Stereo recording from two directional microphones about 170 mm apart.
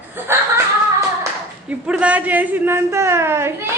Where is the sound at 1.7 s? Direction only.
5° right (ahead or behind).